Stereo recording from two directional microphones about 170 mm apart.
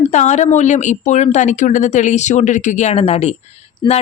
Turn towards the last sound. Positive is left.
turn(degrees=25)  # may be behind; listen again after turning